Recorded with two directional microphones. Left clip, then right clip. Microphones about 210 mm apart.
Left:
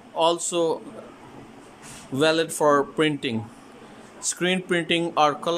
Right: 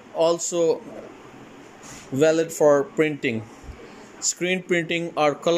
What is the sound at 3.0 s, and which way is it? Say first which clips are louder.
Speech: right 1 dB; 45° left (ahead or behind).